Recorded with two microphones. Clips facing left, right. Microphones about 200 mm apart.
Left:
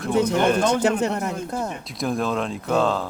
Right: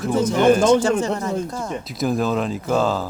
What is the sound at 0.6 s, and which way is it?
Speech, 65° left (ahead or behind).